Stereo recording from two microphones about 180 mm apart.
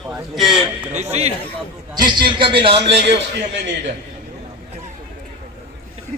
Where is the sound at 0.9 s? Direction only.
40° right (ahead or behind).